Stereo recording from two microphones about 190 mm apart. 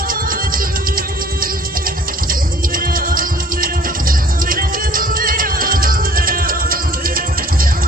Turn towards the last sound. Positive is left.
turn(degrees=-50)  # may be behind; listen again after turning